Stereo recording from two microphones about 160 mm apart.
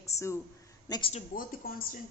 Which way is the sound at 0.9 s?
35° left (ahead or behind).